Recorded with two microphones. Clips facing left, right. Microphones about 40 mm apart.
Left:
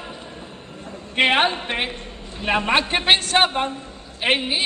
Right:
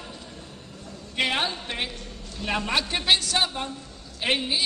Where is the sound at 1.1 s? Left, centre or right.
Left.